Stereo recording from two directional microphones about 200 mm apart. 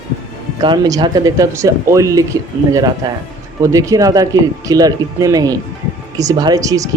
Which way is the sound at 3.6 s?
15° right (ahead or behind).